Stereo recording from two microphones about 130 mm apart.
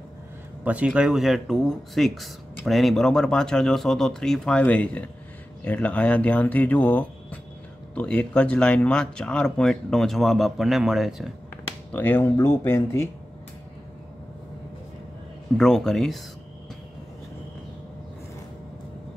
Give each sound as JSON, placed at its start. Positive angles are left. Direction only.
{"t": 0.7, "sound": "speech", "side_deg": -10}
{"t": 11.9, "sound": "speech", "side_deg": 15}
{"t": 15.5, "sound": "speech", "side_deg": 5}